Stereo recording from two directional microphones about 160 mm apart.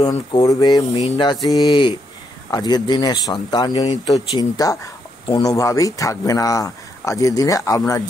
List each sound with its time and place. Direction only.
0.0 s speech: 25° left (ahead or behind)